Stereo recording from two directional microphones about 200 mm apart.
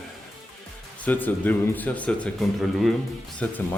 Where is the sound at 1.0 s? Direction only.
10° left (ahead or behind).